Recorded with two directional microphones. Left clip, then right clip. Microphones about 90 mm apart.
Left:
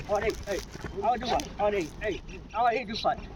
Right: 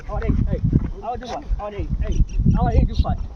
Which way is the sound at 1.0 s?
25° right (ahead or behind).